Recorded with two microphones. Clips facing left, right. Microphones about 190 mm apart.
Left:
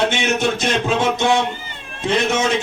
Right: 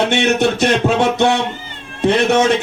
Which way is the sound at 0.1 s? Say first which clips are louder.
Right 5 dB; 65° right (ahead or behind).